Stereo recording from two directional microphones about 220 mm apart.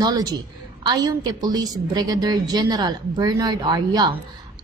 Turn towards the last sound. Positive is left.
turn(degrees=-20)  # may be behind; listen again after turning